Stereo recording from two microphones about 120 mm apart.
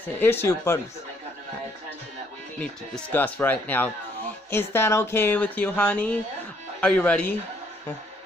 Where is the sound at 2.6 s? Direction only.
15° left (ahead or behind).